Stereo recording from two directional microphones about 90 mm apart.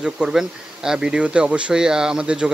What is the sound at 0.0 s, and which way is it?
Speech, 5° right (ahead or behind).